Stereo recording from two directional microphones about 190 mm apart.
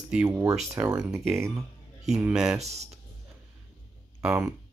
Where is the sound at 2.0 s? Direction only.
5° right (ahead or behind).